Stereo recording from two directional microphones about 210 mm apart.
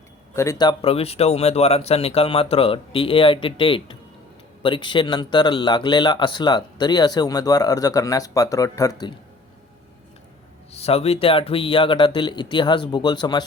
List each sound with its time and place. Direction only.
0.3 s speech: 15° left (ahead or behind)
10.7 s speech: 30° left (ahead or behind)